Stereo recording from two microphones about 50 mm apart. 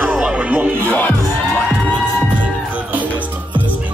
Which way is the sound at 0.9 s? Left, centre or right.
Left.